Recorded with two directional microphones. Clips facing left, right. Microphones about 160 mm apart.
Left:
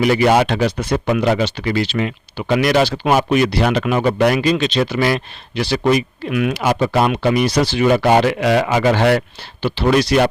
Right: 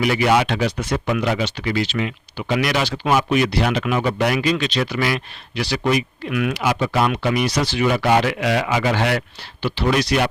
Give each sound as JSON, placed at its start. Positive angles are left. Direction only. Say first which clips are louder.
{"t": 0.0, "sound": "speech", "louder": "left 4 dB", "side_deg": 40}
{"t": 4.4, "sound": "speech", "louder": "left 4 dB", "side_deg": 30}
{"t": 6.6, "sound": "speech", "louder": "left 4 dB", "side_deg": 45}
{"t": 7.0, "sound": "speech", "louder": "left 2 dB", "side_deg": 30}